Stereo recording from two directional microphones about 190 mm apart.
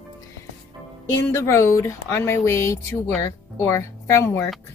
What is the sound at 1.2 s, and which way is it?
Speech, 15° left (ahead or behind).